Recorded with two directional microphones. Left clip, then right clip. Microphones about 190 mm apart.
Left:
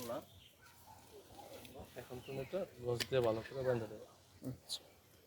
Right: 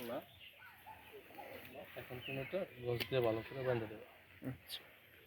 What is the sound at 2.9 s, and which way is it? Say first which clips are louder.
Speech: left 1 dB; 20° right (ahead or behind).